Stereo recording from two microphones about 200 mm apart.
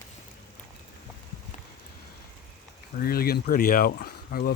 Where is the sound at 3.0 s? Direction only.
50° left (ahead or behind).